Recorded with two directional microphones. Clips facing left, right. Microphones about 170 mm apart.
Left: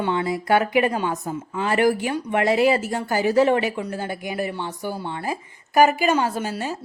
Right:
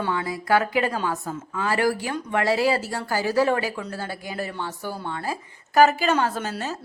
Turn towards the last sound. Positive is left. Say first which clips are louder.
# left 2 dB
turn(degrees=10)  # may be behind; listen again after turning